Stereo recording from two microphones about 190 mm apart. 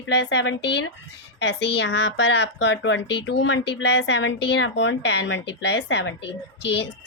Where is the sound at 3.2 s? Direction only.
70° left (ahead or behind).